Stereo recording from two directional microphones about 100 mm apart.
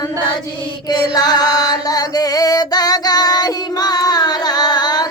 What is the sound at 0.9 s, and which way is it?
Music, 40° left (ahead or behind).